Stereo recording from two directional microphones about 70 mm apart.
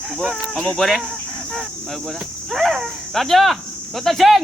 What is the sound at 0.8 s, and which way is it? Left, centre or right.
Speech, centre.